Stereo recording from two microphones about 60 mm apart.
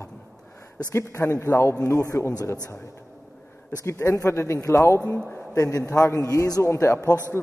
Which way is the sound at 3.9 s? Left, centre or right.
Left.